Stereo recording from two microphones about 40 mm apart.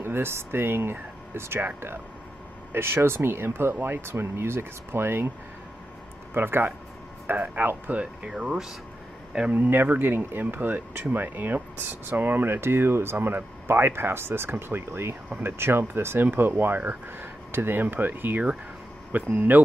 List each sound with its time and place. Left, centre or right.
0.0 s speech: right
2.7 s speech: right
3.8 s speech: right
6.3 s speech: right
7.3 s speech: right
7.9 s speech: right
8.4 s speech: centre
9.3 s speech: right
9.8 s speech: right
14.7 s speech: right
16.3 s speech: right